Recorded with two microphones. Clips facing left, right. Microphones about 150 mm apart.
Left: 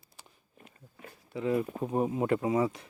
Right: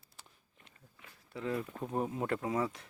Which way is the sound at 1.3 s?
10° left (ahead or behind).